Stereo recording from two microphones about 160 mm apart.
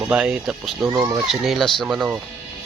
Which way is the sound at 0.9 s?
20° right (ahead or behind).